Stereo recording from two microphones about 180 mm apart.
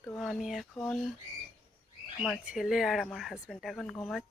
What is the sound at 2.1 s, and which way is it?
Speech, 5° right (ahead or behind).